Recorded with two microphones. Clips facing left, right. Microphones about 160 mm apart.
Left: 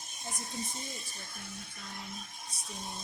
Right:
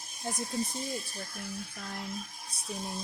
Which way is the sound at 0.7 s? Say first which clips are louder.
Right 7 dB; centre (ahead or behind).